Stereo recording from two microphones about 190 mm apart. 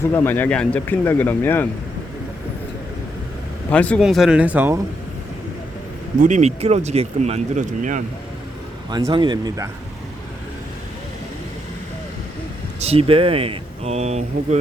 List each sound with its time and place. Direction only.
0.1 s speech: 10° left (ahead or behind)
3.7 s speech: 5° left (ahead or behind); by 4.8 s 10° right (ahead or behind)
6.1 s speech: 40° right (ahead or behind)
8.9 s speech: 20° right (ahead or behind)
12.8 s speech: 30° right (ahead or behind)